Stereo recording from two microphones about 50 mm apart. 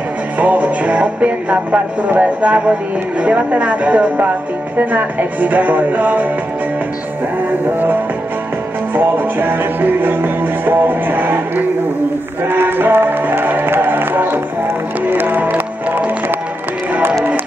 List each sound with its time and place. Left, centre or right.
0.4 s music: right
4.7 s speech: right
8.9 s music: right